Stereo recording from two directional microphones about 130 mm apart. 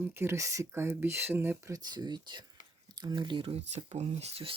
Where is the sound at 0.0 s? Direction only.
20° right (ahead or behind).